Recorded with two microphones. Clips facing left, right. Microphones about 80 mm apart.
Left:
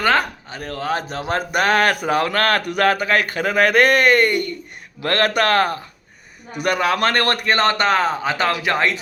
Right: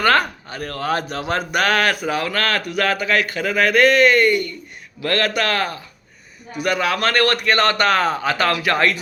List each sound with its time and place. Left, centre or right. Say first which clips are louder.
0.0 s speech: right 1 dB; centre